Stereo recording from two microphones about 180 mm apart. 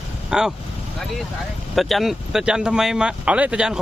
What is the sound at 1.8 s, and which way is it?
Speech, centre (ahead or behind).